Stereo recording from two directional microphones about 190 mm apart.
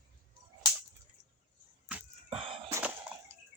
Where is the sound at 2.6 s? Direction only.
15° right (ahead or behind).